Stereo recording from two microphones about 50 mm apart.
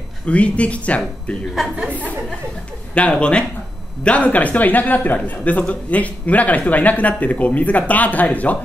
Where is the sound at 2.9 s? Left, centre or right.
Left.